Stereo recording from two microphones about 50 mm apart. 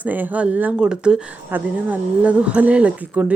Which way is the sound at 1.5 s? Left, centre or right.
Right.